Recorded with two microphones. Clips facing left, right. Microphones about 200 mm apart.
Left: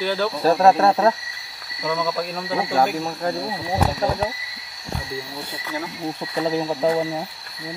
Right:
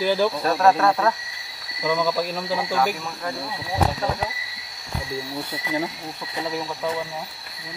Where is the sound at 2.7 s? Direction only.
35° left (ahead or behind).